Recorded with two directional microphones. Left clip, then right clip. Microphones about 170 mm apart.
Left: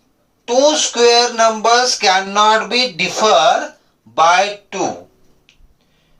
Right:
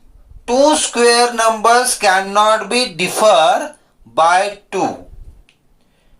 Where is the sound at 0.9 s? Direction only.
40° right (ahead or behind).